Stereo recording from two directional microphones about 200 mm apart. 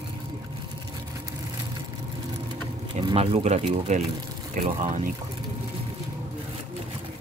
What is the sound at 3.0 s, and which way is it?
Speech, 30° right (ahead or behind).